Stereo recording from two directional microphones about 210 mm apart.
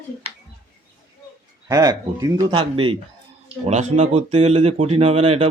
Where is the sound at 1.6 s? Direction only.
15° right (ahead or behind).